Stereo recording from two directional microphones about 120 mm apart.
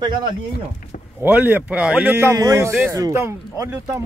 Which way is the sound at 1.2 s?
15° right (ahead or behind).